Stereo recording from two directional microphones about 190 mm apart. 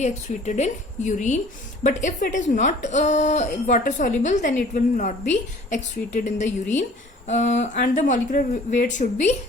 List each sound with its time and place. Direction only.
0.0 s a woman's voice: 40° left (ahead or behind)